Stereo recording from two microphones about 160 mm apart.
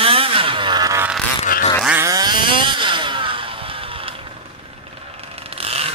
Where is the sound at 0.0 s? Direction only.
35° right (ahead or behind).